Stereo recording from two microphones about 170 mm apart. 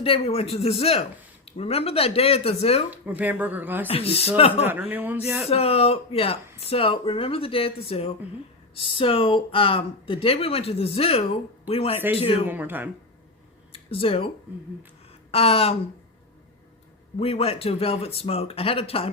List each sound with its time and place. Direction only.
0.0 s speech: 35° left (ahead or behind)
2.9 s speech: 10° right (ahead or behind)
3.8 s speech: 35° left (ahead or behind)
4.6 s speech: 10° right (ahead or behind)
5.5 s speech: 35° left (ahead or behind)
12.5 s speech: 10° right (ahead or behind)
13.7 s speech: 35° left (ahead or behind)
15.3 s speech: 35° left (ahead or behind)
17.2 s speech: 35° left (ahead or behind)